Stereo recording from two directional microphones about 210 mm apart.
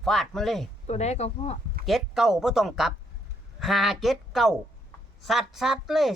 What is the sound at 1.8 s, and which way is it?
Speech, centre (ahead or behind).